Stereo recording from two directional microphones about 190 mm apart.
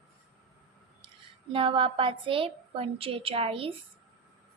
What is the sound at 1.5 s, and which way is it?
A woman's voice, 25° right (ahead or behind).